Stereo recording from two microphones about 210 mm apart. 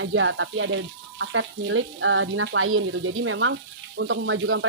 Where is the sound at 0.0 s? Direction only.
70° right (ahead or behind).